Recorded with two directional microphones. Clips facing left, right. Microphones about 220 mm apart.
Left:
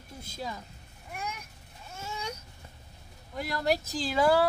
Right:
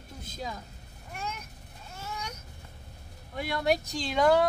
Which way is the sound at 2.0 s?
30° left (ahead or behind).